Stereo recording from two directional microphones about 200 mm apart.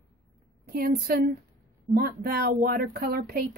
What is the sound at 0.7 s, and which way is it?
Speech, 50° right (ahead or behind).